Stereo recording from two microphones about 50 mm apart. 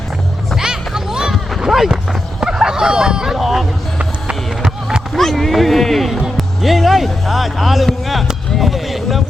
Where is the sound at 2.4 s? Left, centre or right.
Centre.